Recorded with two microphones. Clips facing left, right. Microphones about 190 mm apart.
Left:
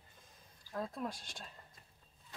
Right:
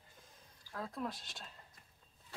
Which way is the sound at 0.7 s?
15° left (ahead or behind).